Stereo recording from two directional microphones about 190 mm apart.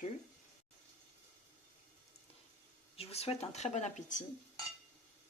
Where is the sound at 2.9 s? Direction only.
30° left (ahead or behind).